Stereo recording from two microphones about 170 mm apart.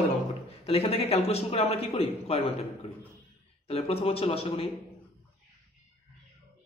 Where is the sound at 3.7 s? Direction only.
35° left (ahead or behind).